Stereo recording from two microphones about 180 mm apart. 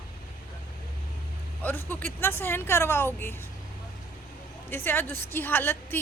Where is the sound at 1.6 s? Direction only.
10° left (ahead or behind).